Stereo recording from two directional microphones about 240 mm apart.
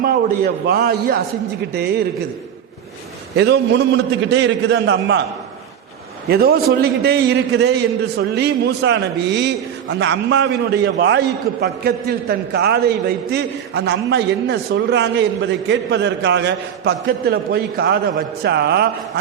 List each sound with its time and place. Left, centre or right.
0.0 s a man's voice: right
3.3 s a man's voice: right
6.2 s a man's voice: right